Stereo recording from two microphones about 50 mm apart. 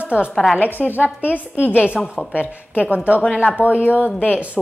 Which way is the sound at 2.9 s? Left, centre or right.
Right.